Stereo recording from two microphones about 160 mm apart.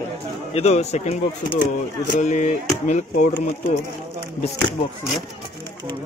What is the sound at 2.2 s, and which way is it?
Speech, 50° left (ahead or behind).